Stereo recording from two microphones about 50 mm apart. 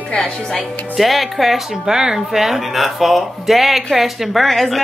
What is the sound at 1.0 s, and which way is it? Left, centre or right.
Speech, centre.